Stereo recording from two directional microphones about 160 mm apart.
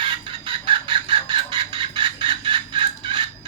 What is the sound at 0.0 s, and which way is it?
Chicken, 30° right (ahead or behind).